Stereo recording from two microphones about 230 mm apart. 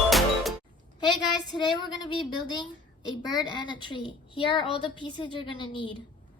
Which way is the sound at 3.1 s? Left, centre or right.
Centre.